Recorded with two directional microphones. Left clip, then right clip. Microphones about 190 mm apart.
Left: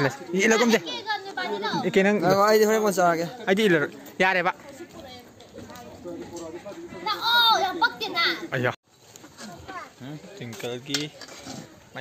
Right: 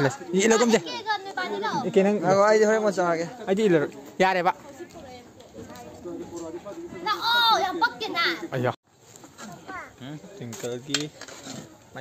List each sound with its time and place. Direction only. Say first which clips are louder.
0.0 s speech: even; 20° right (ahead or behind)
0.8 s speech: right 1 dB; 5° right (ahead or behind)
1.9 s speech: left 1 dB; 15° left (ahead or behind)
2.2 s a man's voice: right 1 dB; 65° left (ahead or behind)
3.4 s a man's voice: left 1 dB; centre (ahead or behind)
4.3 s cutlery: left 1 dB; 15° right (ahead or behind)
6.0 s a sound: even; 40° left (ahead or behind)
7.1 s a sound: left 1 dB; 5° right (ahead or behind)
10.4 s cutlery: even; 5° right (ahead or behind)